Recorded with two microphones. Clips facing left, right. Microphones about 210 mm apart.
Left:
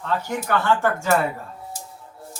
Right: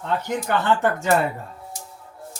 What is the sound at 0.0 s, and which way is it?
Speech, 20° right (ahead or behind).